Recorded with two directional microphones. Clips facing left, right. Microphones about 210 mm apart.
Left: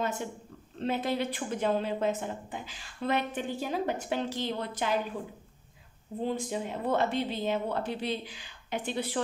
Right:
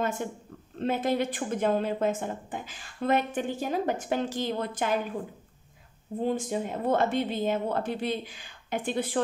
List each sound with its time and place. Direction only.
0.7 s a woman's voice: 50° right (ahead or behind)
6.2 s a woman's voice: 50° right (ahead or behind)